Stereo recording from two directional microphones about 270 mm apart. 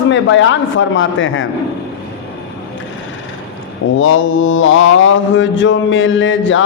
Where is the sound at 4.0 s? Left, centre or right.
Left.